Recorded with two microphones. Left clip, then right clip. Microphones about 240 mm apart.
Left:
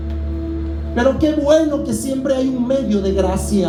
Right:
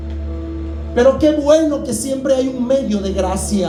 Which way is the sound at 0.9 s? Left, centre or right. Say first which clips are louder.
Right 4 dB; right.